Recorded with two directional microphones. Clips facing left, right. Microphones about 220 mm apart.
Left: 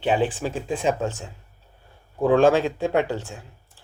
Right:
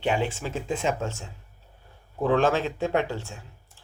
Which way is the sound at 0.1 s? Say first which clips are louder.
Left 5 dB; 15° left (ahead or behind).